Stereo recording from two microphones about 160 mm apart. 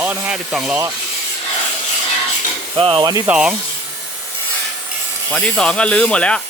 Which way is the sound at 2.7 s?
35° right (ahead or behind).